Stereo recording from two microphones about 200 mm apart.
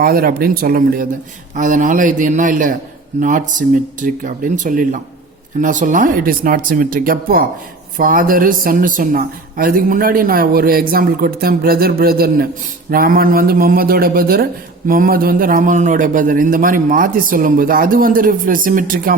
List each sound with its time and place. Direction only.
0.0 s a man's voice: 45° right (ahead or behind)